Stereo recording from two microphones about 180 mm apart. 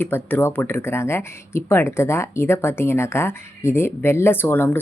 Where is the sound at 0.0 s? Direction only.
10° left (ahead or behind).